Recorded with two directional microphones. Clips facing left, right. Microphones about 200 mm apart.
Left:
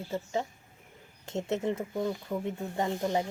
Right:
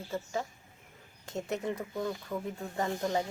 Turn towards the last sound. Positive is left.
turn(degrees=20)  # may be behind; listen again after turning